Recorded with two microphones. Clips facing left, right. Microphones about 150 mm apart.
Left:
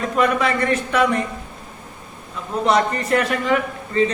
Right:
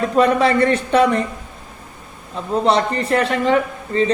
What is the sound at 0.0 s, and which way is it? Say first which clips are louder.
A man's voice: right 4 dB; 30° right (ahead or behind).